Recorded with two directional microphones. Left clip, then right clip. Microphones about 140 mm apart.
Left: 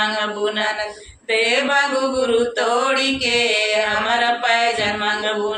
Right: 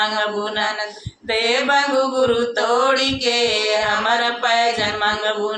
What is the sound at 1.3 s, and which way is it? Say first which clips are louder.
Female singing: left 1 dB; 25° right (ahead or behind).